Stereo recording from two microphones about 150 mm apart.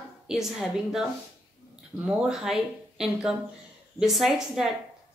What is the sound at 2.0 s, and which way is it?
Speech, 5° right (ahead or behind).